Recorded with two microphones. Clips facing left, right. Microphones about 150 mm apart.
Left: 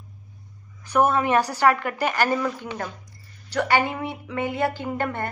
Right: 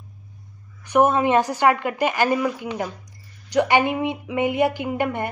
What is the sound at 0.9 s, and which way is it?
A woman's voice, 20° right (ahead or behind).